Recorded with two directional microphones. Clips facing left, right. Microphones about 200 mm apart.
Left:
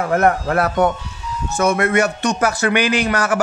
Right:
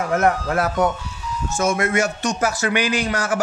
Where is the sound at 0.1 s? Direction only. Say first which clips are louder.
Left 3 dB; 60° left (ahead or behind).